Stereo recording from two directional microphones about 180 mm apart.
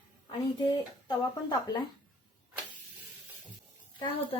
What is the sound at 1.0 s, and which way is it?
Speech, 25° left (ahead or behind).